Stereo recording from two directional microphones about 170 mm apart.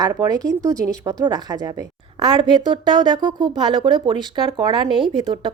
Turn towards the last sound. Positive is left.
turn(degrees=-30)  # may be behind; listen again after turning